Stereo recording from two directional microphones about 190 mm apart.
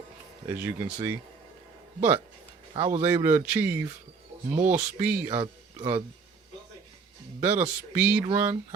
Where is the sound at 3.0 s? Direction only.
15° right (ahead or behind).